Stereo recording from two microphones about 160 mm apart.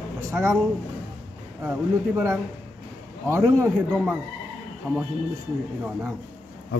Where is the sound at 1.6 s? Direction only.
15° right (ahead or behind).